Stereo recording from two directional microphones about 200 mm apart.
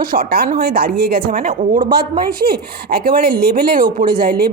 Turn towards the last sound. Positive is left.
turn(degrees=-50)  # may be behind; listen again after turning